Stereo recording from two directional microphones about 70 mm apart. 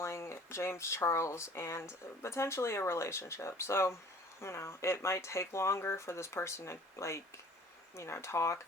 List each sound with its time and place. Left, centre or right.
0.0 s speech: left